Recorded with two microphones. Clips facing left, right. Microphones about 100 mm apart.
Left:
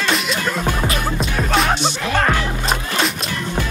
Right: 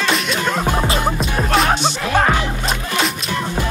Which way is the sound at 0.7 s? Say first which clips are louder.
Right 3 dB; 25° right (ahead or behind).